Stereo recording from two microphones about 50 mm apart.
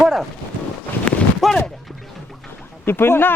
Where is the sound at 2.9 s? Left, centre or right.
Left.